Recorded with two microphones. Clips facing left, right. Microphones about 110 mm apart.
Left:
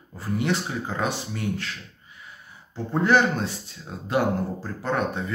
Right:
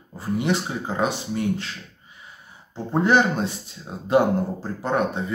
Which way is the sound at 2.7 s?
20° right (ahead or behind).